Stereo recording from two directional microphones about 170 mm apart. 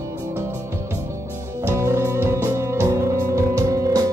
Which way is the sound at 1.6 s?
15° right (ahead or behind).